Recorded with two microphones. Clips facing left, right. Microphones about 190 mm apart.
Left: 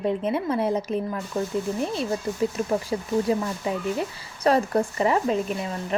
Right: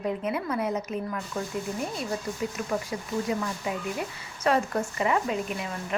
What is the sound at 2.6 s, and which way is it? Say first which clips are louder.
A woman's voice: left 5 dB; 35° left (ahead or behind).